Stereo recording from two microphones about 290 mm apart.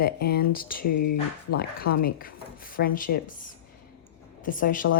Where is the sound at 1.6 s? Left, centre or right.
Left.